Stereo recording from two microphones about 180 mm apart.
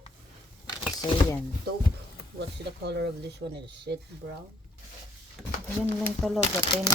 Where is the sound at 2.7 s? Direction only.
70° right (ahead or behind).